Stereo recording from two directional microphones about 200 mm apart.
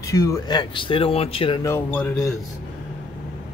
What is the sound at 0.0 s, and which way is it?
Speech, 15° left (ahead or behind).